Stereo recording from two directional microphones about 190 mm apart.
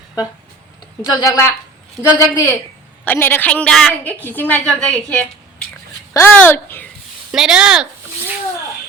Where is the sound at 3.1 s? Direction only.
10° left (ahead or behind).